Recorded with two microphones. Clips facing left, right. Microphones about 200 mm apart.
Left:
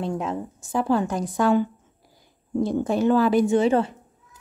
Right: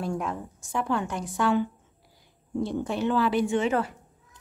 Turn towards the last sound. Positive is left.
turn(degrees=35)  # may be behind; listen again after turning